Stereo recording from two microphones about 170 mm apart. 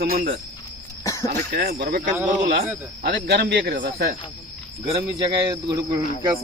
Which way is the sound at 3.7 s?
60° right (ahead or behind).